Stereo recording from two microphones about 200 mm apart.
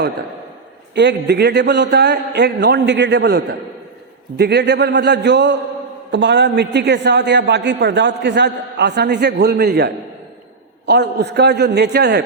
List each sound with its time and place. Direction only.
0.9 s a man's voice: 60° right (ahead or behind)